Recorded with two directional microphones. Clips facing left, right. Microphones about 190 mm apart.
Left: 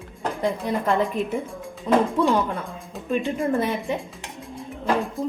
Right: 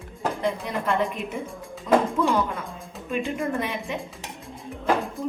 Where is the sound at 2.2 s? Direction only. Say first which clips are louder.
Left 3 dB; 35° left (ahead or behind).